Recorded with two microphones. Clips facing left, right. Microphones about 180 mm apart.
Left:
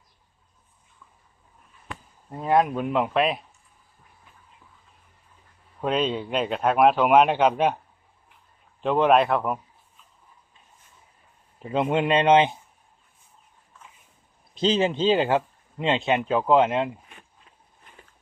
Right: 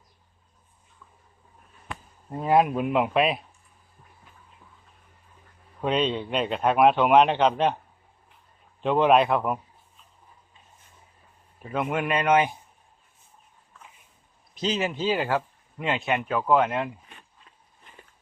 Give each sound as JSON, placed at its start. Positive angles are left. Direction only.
{"t": 2.3, "sound": "speech", "side_deg": -10}
{"t": 5.8, "sound": "speech", "side_deg": 0}
{"t": 8.8, "sound": "speech", "side_deg": 0}
{"t": 11.6, "sound": "speech", "side_deg": 25}
{"t": 14.5, "sound": "speech", "side_deg": 30}